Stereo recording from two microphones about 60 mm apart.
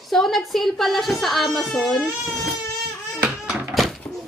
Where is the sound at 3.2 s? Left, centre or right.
Centre.